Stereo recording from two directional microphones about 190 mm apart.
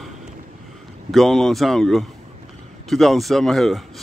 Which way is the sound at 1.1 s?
Centre (ahead or behind).